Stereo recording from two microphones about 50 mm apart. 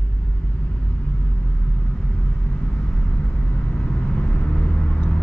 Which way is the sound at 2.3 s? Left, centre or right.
Left.